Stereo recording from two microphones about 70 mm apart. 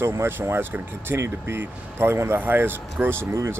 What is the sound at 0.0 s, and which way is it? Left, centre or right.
Speech, right.